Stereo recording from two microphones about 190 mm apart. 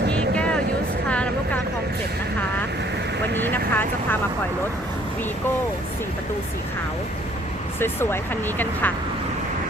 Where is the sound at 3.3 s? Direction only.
10° left (ahead or behind).